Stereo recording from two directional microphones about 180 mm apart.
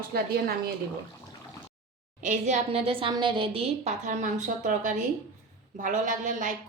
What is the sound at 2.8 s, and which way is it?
A woman's voice, 30° right (ahead or behind).